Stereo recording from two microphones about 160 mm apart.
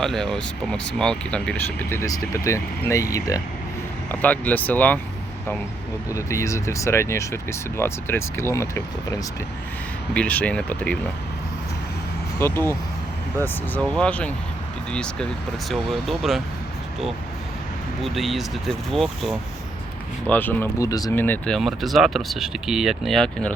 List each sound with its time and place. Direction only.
0.0 s speech: centre (ahead or behind); by 3.4 s 20° left (ahead or behind)
4.1 s speech: 10° left (ahead or behind)
6.1 s speech: 20° left (ahead or behind)
10.2 s speech: 10° left (ahead or behind)
12.4 s speech: 15° left (ahead or behind)
18.0 s speech: centre (ahead or behind)
20.2 s speech: 10° left (ahead or behind)